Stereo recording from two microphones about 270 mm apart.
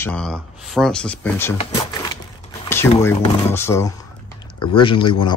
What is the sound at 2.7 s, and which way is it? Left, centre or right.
Speech, centre.